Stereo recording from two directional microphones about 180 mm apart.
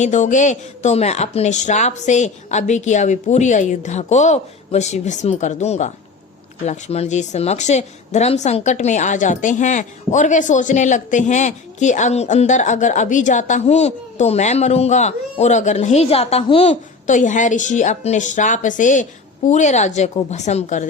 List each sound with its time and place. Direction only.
0.0 s a woman's voice: 40° left (ahead or behind)